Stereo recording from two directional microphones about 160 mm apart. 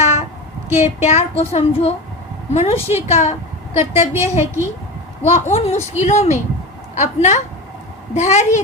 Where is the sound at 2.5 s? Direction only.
45° left (ahead or behind).